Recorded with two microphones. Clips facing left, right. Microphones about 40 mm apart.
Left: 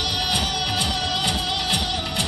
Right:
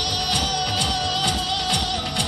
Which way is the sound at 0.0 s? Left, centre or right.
Centre.